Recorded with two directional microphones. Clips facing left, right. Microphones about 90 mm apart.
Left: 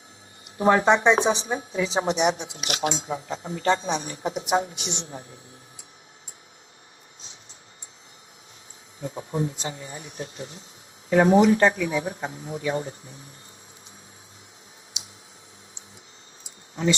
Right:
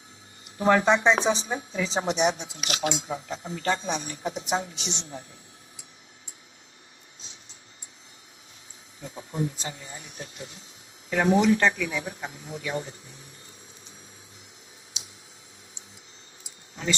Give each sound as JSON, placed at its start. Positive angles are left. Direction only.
{"t": 0.5, "sound": "speech", "side_deg": 35}
{"t": 0.9, "sound": "a woman's voice", "side_deg": 20}
{"t": 2.7, "sound": "speech", "side_deg": 40}
{"t": 9.0, "sound": "speech", "side_deg": 35}